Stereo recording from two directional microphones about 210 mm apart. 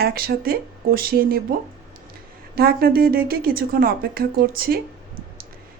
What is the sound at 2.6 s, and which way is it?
A woman's voice, 45° right (ahead or behind).